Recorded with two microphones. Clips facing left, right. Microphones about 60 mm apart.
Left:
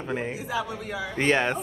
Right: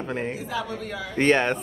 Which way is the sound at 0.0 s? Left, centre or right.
Centre.